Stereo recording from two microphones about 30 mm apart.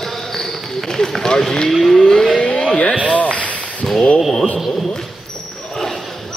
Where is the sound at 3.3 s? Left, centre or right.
Left.